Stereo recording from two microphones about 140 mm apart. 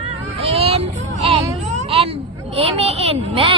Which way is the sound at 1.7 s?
50° right (ahead or behind).